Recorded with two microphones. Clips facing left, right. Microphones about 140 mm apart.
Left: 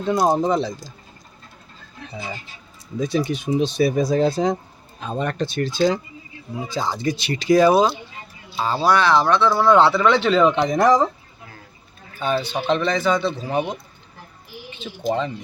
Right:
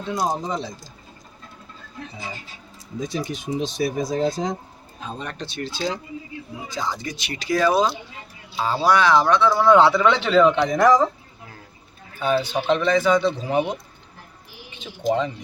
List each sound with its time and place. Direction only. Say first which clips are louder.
0.1 s speech: left 7 dB; 50° left (ahead or behind)
3.0 s speech: left 6 dB; 65° left (ahead or behind); by 5.8 s 45° left (ahead or behind)
6.7 s speech: left 5 dB; 30° left (ahead or behind)
8.6 s a man's voice: even; 10° right (ahead or behind)
10.5 s speech: even; 25° left (ahead or behind)
12.2 s a man's voice: right 1 dB; 10° right (ahead or behind)
14.8 s a man's voice: right 1 dB; 15° right (ahead or behind)